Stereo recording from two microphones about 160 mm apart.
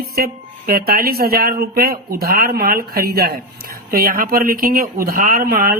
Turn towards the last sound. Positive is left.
turn(degrees=-65)  # may be behind; listen again after turning